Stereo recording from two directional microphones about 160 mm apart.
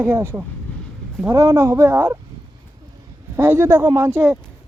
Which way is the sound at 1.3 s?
20° right (ahead or behind).